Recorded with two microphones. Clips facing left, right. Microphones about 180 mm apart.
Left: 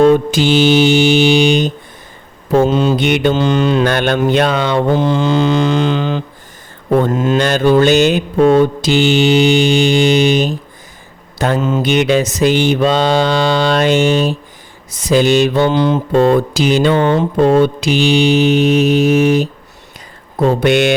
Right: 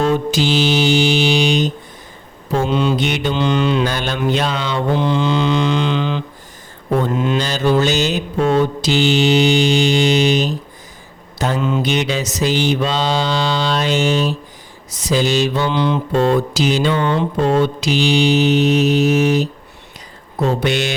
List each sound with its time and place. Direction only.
0.0 s music: 50° left (ahead or behind)
2.5 s mantra: 45° left (ahead or behind)
3.0 s mantra: 60° left (ahead or behind)
3.3 s mantra: 40° left (ahead or behind)
3.8 s mantra: 60° left (ahead or behind); by 7.3 s 45° left (ahead or behind)
7.3 s mantra: 60° left (ahead or behind)